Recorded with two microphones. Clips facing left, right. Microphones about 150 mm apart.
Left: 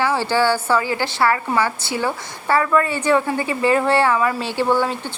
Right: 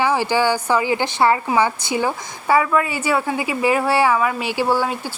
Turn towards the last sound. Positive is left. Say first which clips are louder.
# left 1 dB
turn(degrees=-10)  # may be behind; listen again after turning